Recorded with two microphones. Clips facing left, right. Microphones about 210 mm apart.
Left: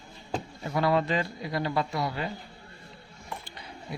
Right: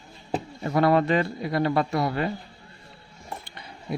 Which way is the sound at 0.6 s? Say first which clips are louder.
Right 5 dB; 55° right (ahead or behind).